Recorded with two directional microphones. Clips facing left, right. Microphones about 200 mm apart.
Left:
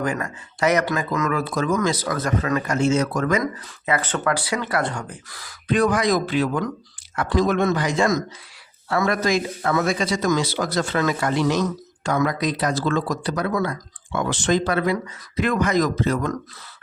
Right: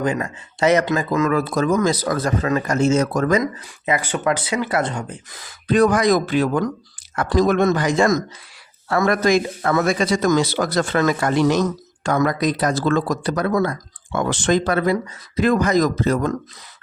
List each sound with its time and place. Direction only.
0.0 s speech: 20° right (ahead or behind); by 3.4 s 40° right (ahead or behind)
3.4 s speech: 15° right (ahead or behind)
5.6 s speech: 40° right (ahead or behind)